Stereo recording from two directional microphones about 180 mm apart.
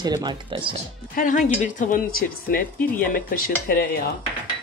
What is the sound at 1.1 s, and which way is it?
A woman's voice, 45° left (ahead or behind).